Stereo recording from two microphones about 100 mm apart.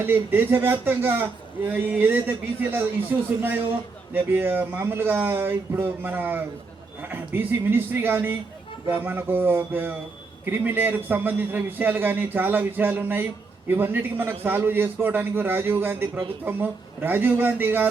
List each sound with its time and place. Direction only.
0.0 s a man's voice: 20° right (ahead or behind)